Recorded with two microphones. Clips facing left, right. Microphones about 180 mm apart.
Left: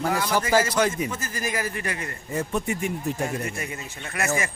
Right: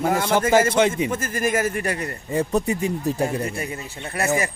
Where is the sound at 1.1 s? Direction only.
50° right (ahead or behind); by 4.3 s 35° right (ahead or behind).